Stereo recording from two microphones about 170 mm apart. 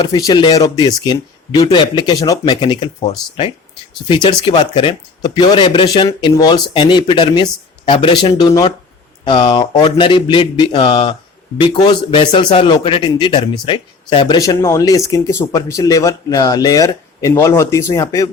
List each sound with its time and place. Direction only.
0.0 s a man's voice: 25° left (ahead or behind)
6.1 s a man's voice: 20° left (ahead or behind)